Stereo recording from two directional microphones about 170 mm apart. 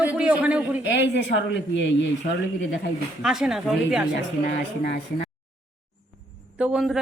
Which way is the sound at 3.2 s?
5° right (ahead or behind).